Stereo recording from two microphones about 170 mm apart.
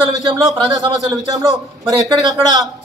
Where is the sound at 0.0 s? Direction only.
25° right (ahead or behind).